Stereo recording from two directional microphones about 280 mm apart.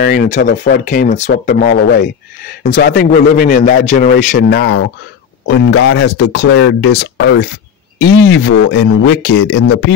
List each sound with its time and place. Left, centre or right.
0.0 s a man's voice: left
5.9 s speech: left